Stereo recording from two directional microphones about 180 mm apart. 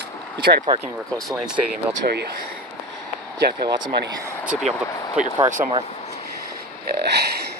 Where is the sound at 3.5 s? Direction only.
25° right (ahead or behind).